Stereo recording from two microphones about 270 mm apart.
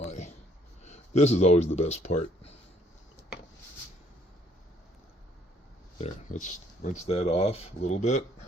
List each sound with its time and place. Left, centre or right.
0.0 s a sound: left
0.9 s speech: left
6.0 s speech: left